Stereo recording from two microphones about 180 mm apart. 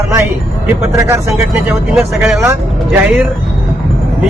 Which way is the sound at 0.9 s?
15° right (ahead or behind).